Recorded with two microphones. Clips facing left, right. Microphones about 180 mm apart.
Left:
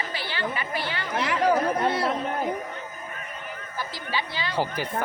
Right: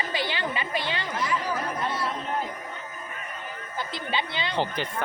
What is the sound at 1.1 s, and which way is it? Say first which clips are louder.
Speech: left 8 dB; 65° left (ahead or behind).